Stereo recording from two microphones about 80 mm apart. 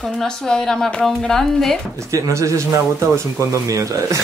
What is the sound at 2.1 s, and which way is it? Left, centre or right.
Speech, right.